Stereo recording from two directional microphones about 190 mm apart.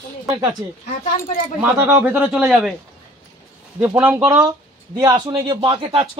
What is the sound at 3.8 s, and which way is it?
Speech, 10° right (ahead or behind).